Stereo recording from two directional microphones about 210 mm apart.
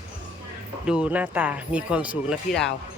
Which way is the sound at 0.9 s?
5° right (ahead or behind).